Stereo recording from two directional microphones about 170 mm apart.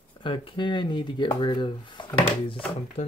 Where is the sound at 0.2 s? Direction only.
30° left (ahead or behind).